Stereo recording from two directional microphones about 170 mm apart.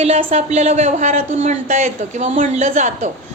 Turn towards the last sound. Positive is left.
turn(degrees=-45)  # may be behind; listen again after turning